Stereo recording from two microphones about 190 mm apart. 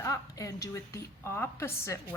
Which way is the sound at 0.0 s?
15° left (ahead or behind).